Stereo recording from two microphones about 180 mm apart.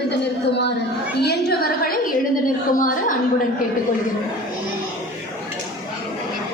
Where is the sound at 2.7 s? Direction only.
45° left (ahead or behind).